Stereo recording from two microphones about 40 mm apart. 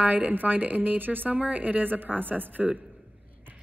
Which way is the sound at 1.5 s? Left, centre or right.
Right.